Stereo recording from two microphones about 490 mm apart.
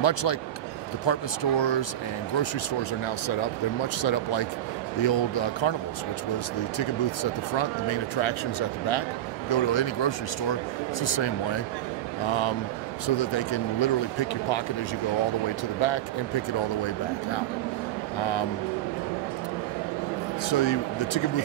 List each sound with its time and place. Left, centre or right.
0.0 s speech: left
3.3 s speech: left
7.5 s speech: left
15.8 s speech: left
20.4 s speech: left